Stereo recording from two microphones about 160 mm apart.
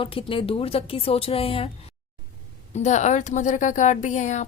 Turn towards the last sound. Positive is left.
turn(degrees=50)  # may be behind; listen again after turning